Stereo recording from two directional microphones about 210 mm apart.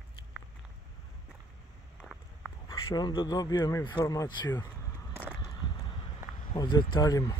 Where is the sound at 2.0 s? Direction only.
Centre (ahead or behind).